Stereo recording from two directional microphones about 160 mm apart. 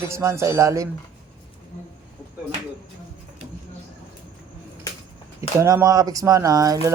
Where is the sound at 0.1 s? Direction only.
15° right (ahead or behind).